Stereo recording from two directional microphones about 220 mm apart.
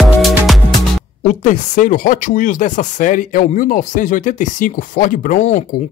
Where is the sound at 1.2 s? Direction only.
35° left (ahead or behind).